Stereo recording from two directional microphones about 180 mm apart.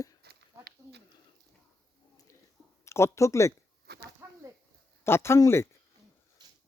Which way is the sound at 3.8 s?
65° right (ahead or behind).